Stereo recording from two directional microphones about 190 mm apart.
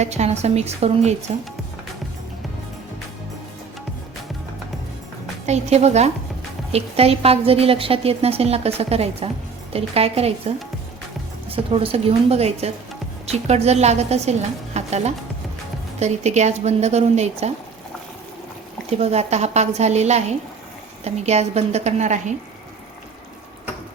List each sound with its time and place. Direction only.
0.0 s a woman's voice: 35° right (ahead or behind)
5.5 s a woman's voice: 35° right (ahead or behind)
18.9 s a woman's voice: 35° right (ahead or behind)